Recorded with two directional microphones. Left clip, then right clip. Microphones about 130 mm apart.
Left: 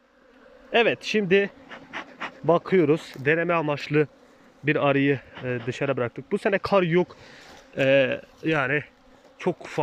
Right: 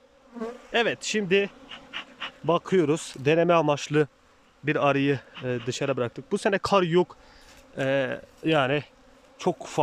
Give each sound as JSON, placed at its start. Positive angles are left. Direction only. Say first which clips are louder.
{"t": 0.7, "sound": "a man's voice", "louder": "left 4 dB", "side_deg": 0}
{"t": 1.7, "sound": "bee", "louder": "left 1 dB", "side_deg": 50}
{"t": 2.5, "sound": "speech", "louder": "left 3 dB", "side_deg": -10}
{"t": 7.8, "sound": "a man's voice", "louder": "left 6 dB", "side_deg": 5}
{"t": 8.4, "sound": "speech", "louder": "right 1 dB", "side_deg": -10}